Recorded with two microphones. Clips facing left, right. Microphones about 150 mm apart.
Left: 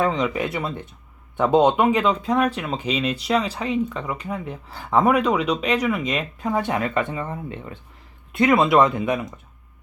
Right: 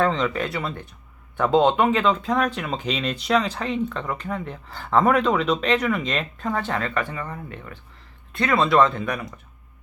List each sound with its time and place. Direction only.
0.0 s speech: 10° left (ahead or behind)